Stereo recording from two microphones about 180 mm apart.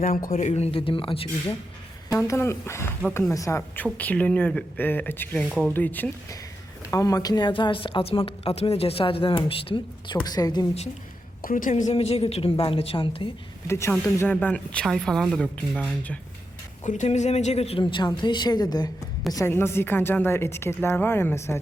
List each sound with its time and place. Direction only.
0.0 s a man's voice: 50° left (ahead or behind); by 1.3 s 30° left (ahead or behind)
2.2 s a woman's voice: 15° left (ahead or behind)
11.4 s a man's voice: 50° left (ahead or behind); by 13.3 s 30° left (ahead or behind)
13.7 s a woman's voice: 15° left (ahead or behind)
16.8 s a man's voice: 40° left (ahead or behind); by 21.6 s 15° left (ahead or behind)